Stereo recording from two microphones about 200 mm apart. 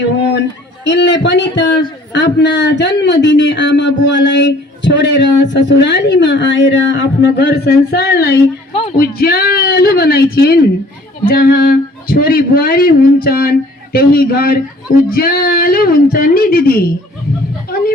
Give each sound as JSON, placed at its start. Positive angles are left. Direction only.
{"t": 0.9, "sound": "a man's voice", "side_deg": 60}
{"t": 8.7, "sound": "a sound", "side_deg": 30}
{"t": 9.0, "sound": "speech", "side_deg": 50}